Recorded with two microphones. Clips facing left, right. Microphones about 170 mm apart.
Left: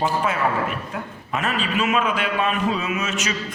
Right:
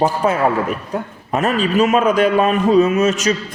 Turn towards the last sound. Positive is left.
turn(degrees=-40)  # may be behind; listen again after turning